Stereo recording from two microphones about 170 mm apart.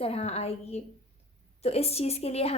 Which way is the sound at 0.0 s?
35° left (ahead or behind).